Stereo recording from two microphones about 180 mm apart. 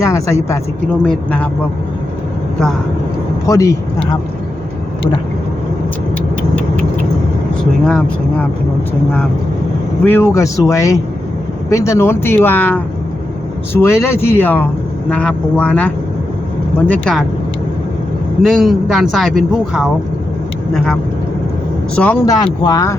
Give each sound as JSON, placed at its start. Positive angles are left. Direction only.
{"t": 0.0, "sound": "speech", "side_deg": 15}
{"t": 3.4, "sound": "speech", "side_deg": 15}
{"t": 7.9, "sound": "speech", "side_deg": 5}
{"t": 10.0, "sound": "speech", "side_deg": 10}
{"t": 13.8, "sound": "speech", "side_deg": 15}
{"t": 16.9, "sound": "speech", "side_deg": 5}
{"t": 18.4, "sound": "speech", "side_deg": 0}
{"t": 22.4, "sound": "speech", "side_deg": 25}